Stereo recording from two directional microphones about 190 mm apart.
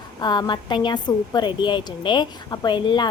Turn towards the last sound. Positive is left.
turn(degrees=25)  # may be behind; listen again after turning